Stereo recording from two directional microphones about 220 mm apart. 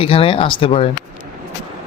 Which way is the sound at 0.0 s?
25° left (ahead or behind).